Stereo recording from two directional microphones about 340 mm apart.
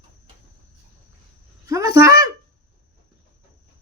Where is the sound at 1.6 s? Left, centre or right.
Centre.